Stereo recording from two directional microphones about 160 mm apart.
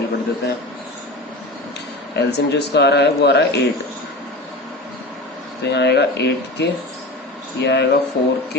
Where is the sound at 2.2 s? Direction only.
90° left.